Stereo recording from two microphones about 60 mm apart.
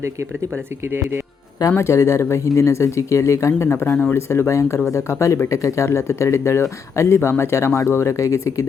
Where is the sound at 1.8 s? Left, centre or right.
Left.